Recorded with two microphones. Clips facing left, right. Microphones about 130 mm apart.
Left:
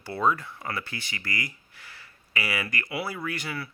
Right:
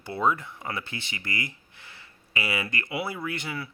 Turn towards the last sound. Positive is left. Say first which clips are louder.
# even
turn(degrees=-20)  # may be behind; listen again after turning